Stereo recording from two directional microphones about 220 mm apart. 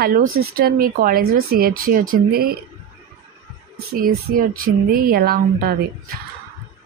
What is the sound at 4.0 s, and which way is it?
A woman's voice, 40° right (ahead or behind).